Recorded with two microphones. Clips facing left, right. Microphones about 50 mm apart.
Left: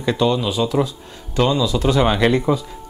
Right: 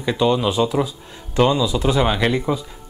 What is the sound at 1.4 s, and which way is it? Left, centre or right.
Speech, centre.